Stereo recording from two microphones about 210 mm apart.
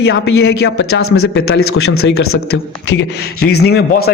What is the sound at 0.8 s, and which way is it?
Speech, 80° left.